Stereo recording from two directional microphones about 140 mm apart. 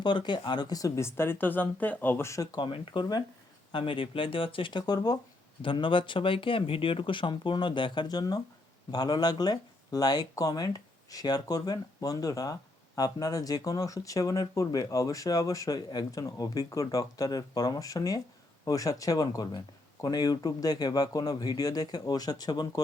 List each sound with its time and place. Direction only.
0.0 s speech: 35° left (ahead or behind)
2.6 s speech: 40° left (ahead or behind)